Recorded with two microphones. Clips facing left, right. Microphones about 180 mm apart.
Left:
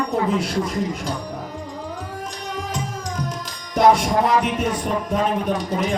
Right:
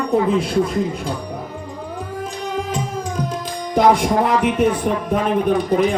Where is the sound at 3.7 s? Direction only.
55° right (ahead or behind).